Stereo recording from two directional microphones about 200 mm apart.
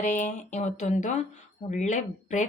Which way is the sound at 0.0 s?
40° left (ahead or behind).